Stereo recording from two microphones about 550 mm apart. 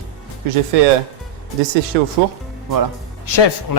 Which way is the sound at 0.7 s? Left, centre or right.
Right.